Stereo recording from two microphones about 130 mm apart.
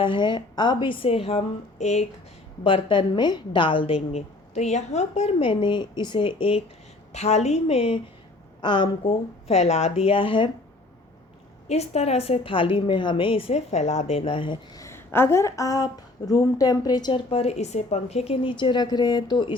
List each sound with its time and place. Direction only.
0.0 s a woman's voice: 35° left (ahead or behind)
1.8 s a woman's voice: 60° left (ahead or behind)
2.6 s a woman's voice: 40° left (ahead or behind)
4.5 s a woman's voice: 60° left (ahead or behind); by 6.6 s 45° left (ahead or behind)
7.1 s a woman's voice: 60° left (ahead or behind)
8.6 s a woman's voice: 35° left (ahead or behind)
9.5 s a woman's voice: 55° left (ahead or behind); by 10.5 s 40° left (ahead or behind)
11.7 s a woman's voice: 55° left (ahead or behind); by 17.2 s 30° left (ahead or behind)
17.2 s a woman's voice: 50° left (ahead or behind)
18.5 s a woman's voice: 35° left (ahead or behind)